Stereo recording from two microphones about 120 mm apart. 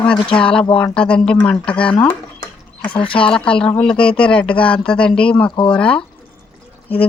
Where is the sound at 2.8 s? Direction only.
45° left (ahead or behind).